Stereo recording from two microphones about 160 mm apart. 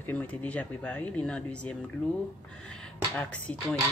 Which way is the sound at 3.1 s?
10° left (ahead or behind).